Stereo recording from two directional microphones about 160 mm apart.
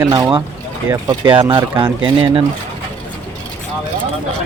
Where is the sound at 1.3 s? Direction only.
30° right (ahead or behind).